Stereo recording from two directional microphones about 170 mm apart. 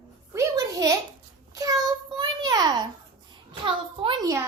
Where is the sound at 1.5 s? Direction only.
20° right (ahead or behind).